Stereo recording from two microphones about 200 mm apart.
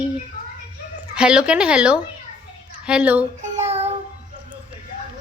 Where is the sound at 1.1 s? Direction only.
5° right (ahead or behind).